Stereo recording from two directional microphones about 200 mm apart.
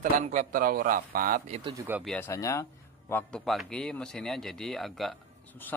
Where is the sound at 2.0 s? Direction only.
5° left (ahead or behind).